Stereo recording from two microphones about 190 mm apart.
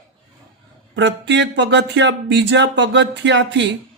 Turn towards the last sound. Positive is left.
turn(degrees=-65)  # may be behind; listen again after turning